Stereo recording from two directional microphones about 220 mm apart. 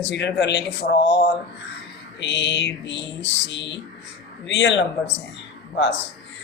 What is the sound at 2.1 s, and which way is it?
Speech, 55° left (ahead or behind).